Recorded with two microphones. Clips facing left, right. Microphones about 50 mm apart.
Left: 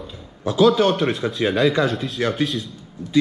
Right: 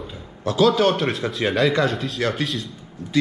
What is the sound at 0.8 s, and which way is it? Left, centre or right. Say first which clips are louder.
A man's voice: left 1 dB; right.